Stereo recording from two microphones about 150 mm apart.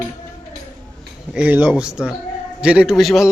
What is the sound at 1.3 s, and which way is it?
A man's voice, 10° right (ahead or behind).